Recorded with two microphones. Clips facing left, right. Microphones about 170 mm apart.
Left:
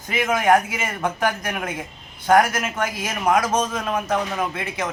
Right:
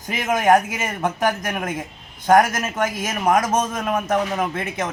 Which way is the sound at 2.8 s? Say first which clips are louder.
Right 2 dB; 45° right (ahead or behind).